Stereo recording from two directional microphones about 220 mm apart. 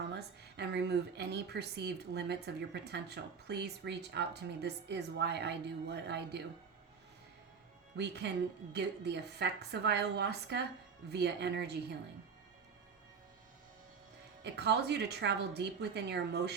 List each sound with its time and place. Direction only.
0.1 s speech: 50° right (ahead or behind)
7.9 s speech: 50° right (ahead or behind)
14.4 s speech: 50° right (ahead or behind)